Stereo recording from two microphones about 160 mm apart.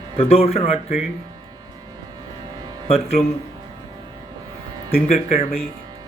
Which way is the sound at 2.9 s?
40° left (ahead or behind).